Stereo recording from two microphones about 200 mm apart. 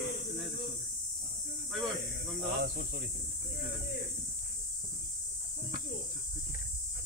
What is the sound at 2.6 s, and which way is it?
Speech, 50° right (ahead or behind).